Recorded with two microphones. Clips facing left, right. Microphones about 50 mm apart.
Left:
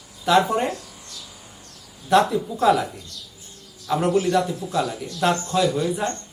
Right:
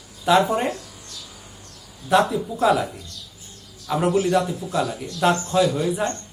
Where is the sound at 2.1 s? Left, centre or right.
Centre.